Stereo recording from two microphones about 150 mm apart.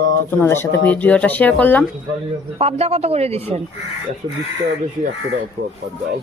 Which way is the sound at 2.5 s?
40° right (ahead or behind).